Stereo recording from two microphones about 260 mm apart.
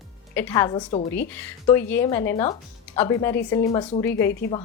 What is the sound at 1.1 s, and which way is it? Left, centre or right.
Speech, centre.